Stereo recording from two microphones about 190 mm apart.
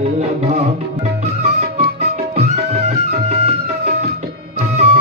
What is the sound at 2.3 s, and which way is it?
Music, 35° right (ahead or behind).